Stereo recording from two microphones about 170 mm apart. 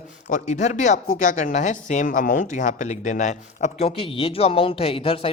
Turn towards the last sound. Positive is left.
turn(degrees=35)  # may be behind; listen again after turning